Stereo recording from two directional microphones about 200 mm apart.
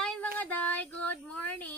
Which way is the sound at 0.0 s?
5° left (ahead or behind).